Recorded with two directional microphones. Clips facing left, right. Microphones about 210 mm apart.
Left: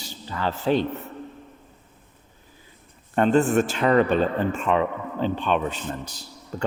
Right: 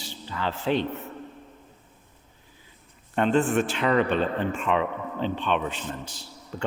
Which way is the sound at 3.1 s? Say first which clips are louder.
Left 3 dB; 40° left (ahead or behind).